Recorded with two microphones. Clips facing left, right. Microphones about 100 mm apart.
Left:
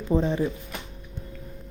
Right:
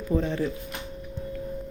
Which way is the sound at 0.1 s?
20° left (ahead or behind).